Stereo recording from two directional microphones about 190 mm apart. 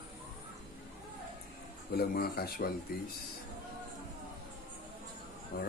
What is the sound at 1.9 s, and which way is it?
Speech, 55° left (ahead or behind).